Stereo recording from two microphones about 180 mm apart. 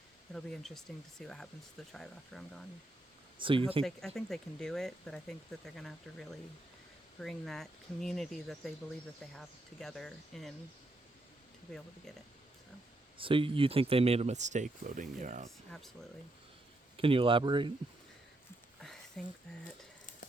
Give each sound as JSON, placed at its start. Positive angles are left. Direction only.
{"t": 0.3, "sound": "speech", "side_deg": 0}
{"t": 3.3, "sound": "speech", "side_deg": -30}
{"t": 3.8, "sound": "speech", "side_deg": 0}
{"t": 13.1, "sound": "speech", "side_deg": -30}
{"t": 17.0, "sound": "speech", "side_deg": -30}
{"t": 18.8, "sound": "a sound", "side_deg": 0}